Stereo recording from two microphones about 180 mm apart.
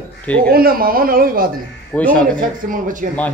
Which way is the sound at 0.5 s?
55° right (ahead or behind).